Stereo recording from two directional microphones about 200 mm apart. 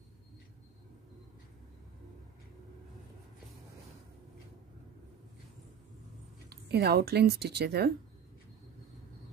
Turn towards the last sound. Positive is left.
turn(degrees=-55)  # may be behind; listen again after turning